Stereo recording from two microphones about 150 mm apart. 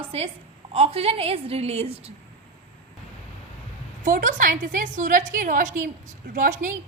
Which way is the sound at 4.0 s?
65° right (ahead or behind).